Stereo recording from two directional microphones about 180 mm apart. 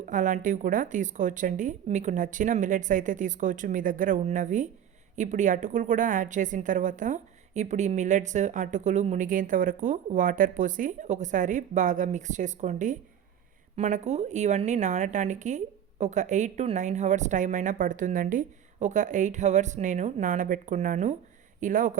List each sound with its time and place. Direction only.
0.0 s a woman's voice: 45° right (ahead or behind)